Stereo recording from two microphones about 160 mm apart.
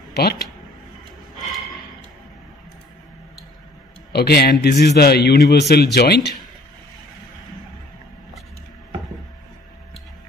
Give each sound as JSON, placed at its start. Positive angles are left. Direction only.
{"t": 0.1, "sound": "speech", "side_deg": 85}
{"t": 4.1, "sound": "a man's voice", "side_deg": 85}